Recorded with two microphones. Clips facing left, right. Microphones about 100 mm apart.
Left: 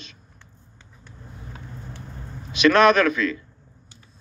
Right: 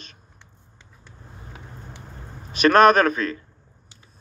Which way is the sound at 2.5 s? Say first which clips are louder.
Right 1 dB; 45° right (ahead or behind).